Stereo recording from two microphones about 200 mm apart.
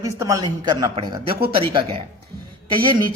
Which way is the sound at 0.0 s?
15° right (ahead or behind).